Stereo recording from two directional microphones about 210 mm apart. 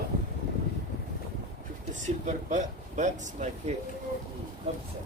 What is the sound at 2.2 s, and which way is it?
Speech, 35° right (ahead or behind).